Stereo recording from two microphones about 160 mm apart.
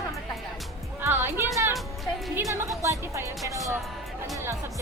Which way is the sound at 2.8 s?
20° right (ahead or behind).